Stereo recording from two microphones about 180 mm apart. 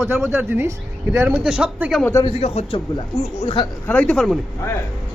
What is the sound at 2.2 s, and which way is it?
A man's voice, 35° left (ahead or behind).